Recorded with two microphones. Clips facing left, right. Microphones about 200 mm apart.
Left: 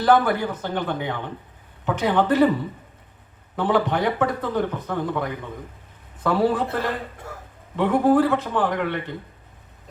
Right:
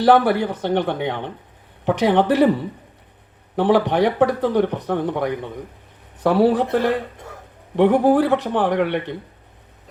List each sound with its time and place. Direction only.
0.1 s a man's voice: 70° right (ahead or behind)
3.5 s a man's voice: 70° right (ahead or behind)